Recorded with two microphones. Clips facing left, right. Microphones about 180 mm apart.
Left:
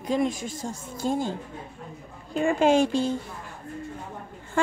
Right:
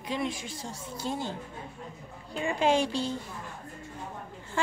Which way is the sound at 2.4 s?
50° left (ahead or behind).